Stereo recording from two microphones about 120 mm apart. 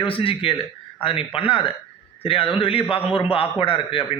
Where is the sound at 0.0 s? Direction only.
50° left (ahead or behind).